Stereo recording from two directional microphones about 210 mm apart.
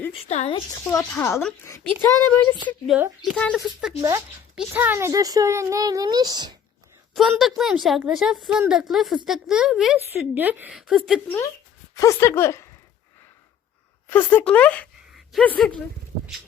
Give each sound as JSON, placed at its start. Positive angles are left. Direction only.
{"t": 0.1, "sound": "speech", "side_deg": 30}
{"t": 0.9, "sound": "a woman's voice", "side_deg": 10}
{"t": 7.1, "sound": "a woman's voice", "side_deg": 0}
{"t": 11.3, "sound": "speech", "side_deg": 15}
{"t": 14.1, "sound": "a woman's voice", "side_deg": 10}